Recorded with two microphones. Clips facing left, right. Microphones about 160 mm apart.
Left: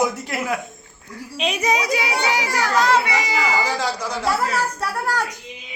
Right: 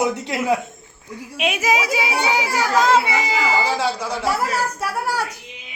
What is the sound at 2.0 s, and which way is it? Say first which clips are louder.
A child's voice: right 1 dB; 15° right (ahead or behind).